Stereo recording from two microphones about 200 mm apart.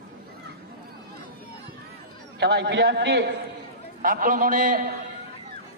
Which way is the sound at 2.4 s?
55° right (ahead or behind).